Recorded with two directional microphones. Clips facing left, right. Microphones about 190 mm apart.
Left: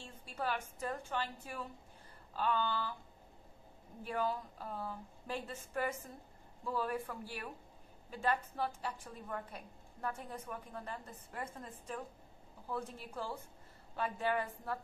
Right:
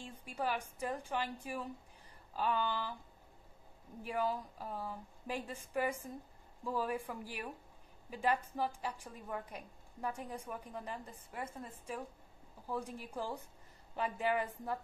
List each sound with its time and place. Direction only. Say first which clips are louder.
0.0 s a woman's voice: right 2 dB; 15° right (ahead or behind)
4.0 s a woman's voice: right 1 dB; 15° right (ahead or behind)